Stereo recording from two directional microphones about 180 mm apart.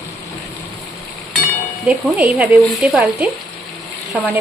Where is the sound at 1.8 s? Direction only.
5° right (ahead or behind).